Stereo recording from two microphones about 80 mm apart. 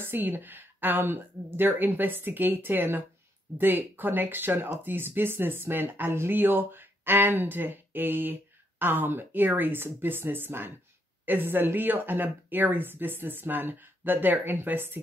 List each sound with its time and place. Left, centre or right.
0.0 s speech: right